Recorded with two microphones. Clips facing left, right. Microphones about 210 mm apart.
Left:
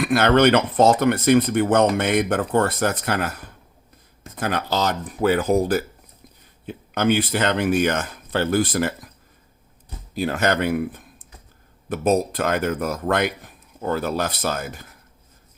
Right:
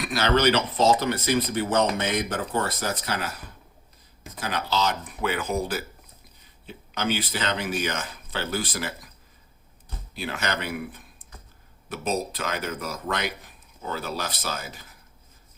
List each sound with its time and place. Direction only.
0.0 s speech: 55° left (ahead or behind)
6.7 s speech: 50° left (ahead or behind)
10.2 s speech: 45° left (ahead or behind)